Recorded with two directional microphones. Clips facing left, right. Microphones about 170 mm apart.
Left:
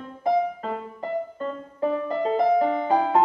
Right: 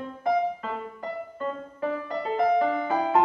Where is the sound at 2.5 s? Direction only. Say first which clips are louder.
Left 3 dB; 30° left (ahead or behind).